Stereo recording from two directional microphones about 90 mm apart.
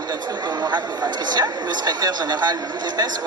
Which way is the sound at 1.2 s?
50° right (ahead or behind).